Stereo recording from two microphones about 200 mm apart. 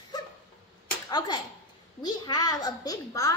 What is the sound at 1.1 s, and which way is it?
A child's voice, 20° left (ahead or behind).